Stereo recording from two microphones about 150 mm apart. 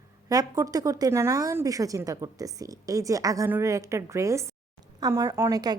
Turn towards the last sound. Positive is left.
turn(degrees=-25)  # may be behind; listen again after turning